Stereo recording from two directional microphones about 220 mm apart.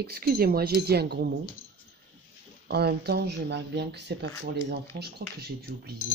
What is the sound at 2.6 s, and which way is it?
Speech, 45° right (ahead or behind).